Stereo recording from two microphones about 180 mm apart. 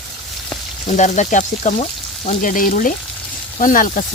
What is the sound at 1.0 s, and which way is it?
Speech, 45° left (ahead or behind).